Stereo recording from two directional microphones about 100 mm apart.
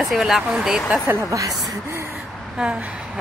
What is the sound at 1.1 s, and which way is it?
Speech, 35° right (ahead or behind).